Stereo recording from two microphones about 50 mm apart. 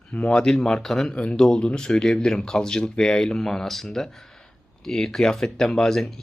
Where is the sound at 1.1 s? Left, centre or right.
Centre.